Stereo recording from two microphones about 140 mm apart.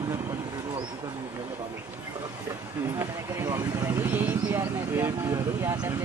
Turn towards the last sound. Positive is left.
turn(degrees=-25)  # may be behind; listen again after turning